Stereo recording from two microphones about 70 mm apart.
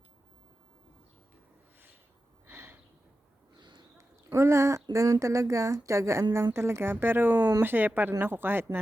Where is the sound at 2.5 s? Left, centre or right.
Right.